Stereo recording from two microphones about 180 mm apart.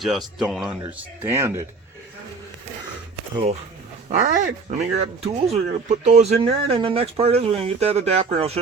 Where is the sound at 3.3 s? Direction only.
35° right (ahead or behind).